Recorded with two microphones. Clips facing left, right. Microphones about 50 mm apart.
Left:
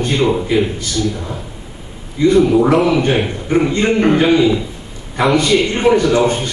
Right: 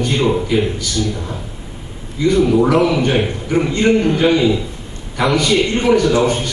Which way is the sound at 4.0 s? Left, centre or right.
Left.